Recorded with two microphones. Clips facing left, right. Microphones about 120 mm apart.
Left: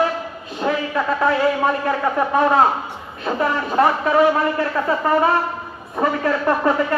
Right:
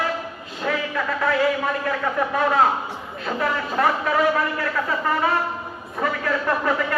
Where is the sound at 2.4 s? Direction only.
30° left (ahead or behind).